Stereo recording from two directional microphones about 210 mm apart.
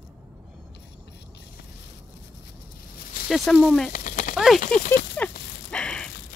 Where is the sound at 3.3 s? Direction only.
Centre (ahead or behind).